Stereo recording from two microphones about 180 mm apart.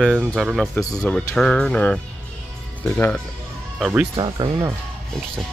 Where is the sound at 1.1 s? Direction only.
5° left (ahead or behind).